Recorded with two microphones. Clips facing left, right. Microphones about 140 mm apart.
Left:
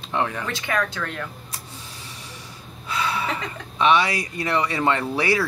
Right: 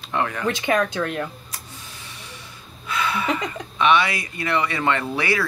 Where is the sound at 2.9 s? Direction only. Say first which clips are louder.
Right 1 dB; 35° left (ahead or behind).